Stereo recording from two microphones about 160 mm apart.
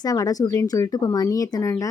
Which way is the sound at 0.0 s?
25° left (ahead or behind).